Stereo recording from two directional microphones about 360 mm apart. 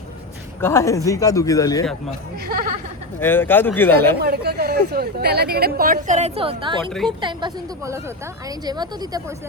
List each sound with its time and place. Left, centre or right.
0.6 s a man's voice: centre
2.5 s a woman's voice: right
3.2 s speech: centre
4.2 s a woman's voice: right; by 9.2 s centre